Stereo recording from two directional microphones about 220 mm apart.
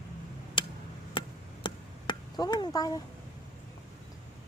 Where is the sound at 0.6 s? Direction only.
25° left (ahead or behind).